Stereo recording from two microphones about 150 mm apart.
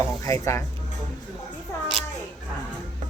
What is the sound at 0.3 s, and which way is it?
Speech, 20° left (ahead or behind).